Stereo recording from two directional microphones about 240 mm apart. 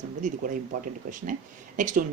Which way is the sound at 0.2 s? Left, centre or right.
Right.